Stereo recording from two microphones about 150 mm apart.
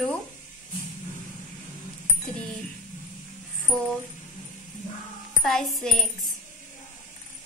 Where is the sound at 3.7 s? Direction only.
5° left (ahead or behind).